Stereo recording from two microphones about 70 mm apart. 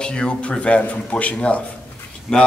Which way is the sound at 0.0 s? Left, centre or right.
Centre.